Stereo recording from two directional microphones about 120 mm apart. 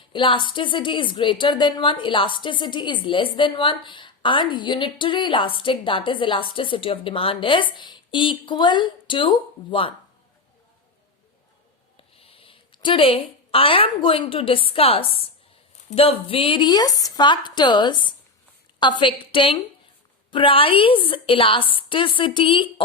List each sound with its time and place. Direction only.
0.1 s a woman's voice: 45° left (ahead or behind)
12.1 s a woman's voice: 50° left (ahead or behind)